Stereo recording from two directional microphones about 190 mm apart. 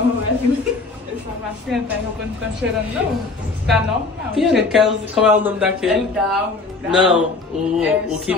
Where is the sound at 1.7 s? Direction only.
Centre (ahead or behind).